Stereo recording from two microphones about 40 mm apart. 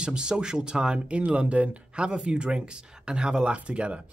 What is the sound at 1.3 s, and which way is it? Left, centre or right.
Speech, right.